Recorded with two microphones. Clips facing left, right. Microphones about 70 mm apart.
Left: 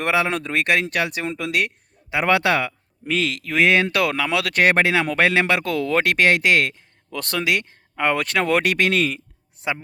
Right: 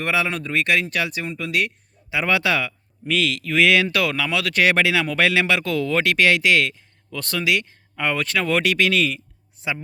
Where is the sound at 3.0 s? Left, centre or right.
Left.